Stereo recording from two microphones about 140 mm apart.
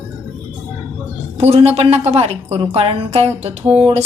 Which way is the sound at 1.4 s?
50° right (ahead or behind).